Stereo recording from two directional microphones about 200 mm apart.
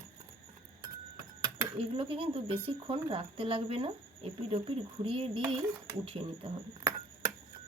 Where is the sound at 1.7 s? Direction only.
30° right (ahead or behind).